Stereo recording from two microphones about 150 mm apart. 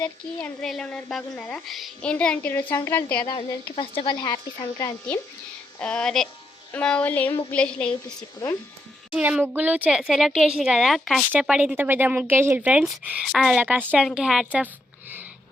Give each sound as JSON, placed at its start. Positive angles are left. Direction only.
{"t": 0.0, "sound": "a woman's voice", "side_deg": 5}
{"t": 3.2, "sound": "speech", "side_deg": 35}
{"t": 5.8, "sound": "a woman's voice", "side_deg": 5}
{"t": 9.1, "sound": "a woman's voice", "side_deg": -10}